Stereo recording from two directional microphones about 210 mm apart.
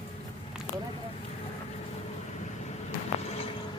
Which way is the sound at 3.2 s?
30° left (ahead or behind).